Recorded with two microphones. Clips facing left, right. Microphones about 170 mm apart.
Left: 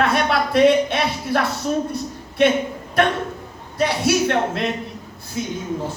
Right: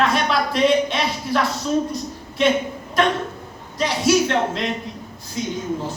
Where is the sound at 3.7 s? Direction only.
55° left (ahead or behind).